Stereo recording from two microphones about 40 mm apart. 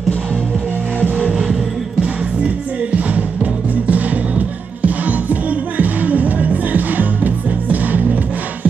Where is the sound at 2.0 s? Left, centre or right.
Right.